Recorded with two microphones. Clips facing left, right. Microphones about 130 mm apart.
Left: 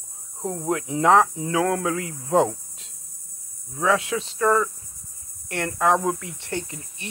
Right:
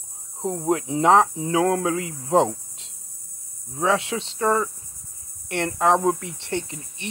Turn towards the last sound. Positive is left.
turn(degrees=-25)  # may be behind; listen again after turning